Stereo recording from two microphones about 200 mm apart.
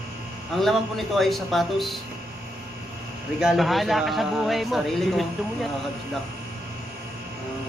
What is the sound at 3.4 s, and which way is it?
Speech, centre (ahead or behind).